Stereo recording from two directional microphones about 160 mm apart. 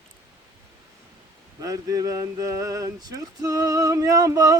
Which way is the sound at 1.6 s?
20° right (ahead or behind).